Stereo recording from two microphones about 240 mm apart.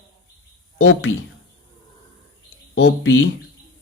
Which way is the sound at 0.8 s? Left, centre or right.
Left.